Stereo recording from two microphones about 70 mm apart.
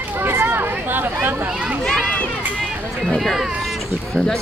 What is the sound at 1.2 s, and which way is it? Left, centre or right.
Speech, right.